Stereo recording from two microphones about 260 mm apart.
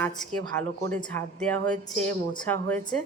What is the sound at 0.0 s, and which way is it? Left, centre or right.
A woman's voice, centre.